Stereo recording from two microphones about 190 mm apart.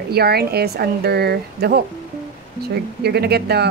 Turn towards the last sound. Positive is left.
turn(degrees=-55)  # may be behind; listen again after turning